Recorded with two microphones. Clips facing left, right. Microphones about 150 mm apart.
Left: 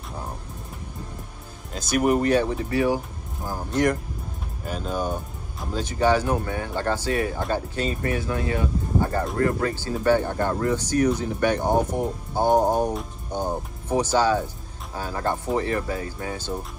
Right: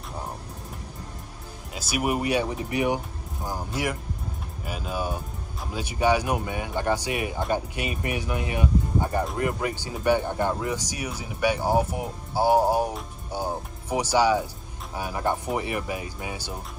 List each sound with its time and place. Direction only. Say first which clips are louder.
1.7 s speech: left 5 dB; 10° right (ahead or behind)